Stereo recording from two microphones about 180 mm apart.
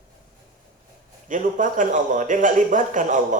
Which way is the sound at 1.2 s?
45° right (ahead or behind).